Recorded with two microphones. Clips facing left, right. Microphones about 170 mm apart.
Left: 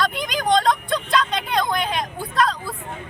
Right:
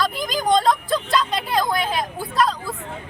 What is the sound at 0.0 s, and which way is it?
Vehicle, centre (ahead or behind).